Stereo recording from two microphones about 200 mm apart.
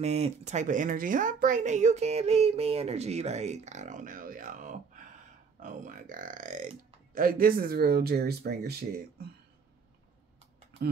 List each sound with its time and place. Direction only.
0.0 s speech: 30° right (ahead or behind); by 9.3 s 50° right (ahead or behind)